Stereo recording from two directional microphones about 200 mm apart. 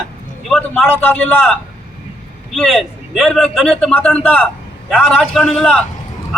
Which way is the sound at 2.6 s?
Centre (ahead or behind).